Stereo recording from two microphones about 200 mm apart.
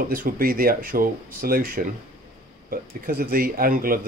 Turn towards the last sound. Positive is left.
turn(degrees=-45)  # may be behind; listen again after turning